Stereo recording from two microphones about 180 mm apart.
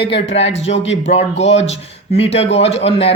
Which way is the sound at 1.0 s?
35° left (ahead or behind).